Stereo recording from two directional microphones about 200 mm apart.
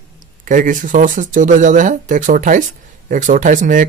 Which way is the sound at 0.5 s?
40° right (ahead or behind).